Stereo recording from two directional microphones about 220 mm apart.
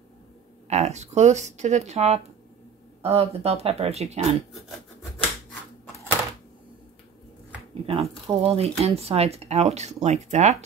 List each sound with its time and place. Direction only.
0.7 s speech: 30° right (ahead or behind)
7.8 s speech: 25° right (ahead or behind)